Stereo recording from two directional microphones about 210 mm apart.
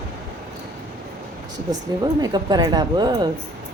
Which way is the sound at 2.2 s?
20° right (ahead or behind).